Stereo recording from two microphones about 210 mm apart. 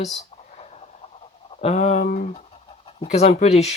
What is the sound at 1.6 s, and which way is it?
Speech, 30° left (ahead or behind).